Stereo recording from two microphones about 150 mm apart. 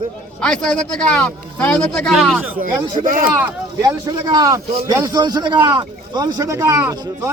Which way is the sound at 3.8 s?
25° right (ahead or behind).